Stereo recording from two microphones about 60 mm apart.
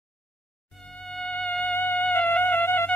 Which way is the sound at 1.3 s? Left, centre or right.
Left.